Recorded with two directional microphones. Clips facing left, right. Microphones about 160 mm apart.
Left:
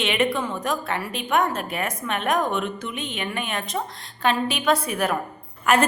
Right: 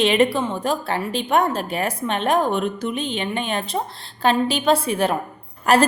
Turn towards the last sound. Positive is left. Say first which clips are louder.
# right 3 dB
turn(degrees=-35)  # may be behind; listen again after turning